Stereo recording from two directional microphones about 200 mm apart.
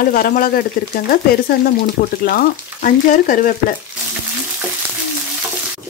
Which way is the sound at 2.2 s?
45° left (ahead or behind).